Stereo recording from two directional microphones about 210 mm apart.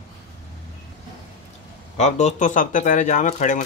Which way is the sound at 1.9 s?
30° left (ahead or behind).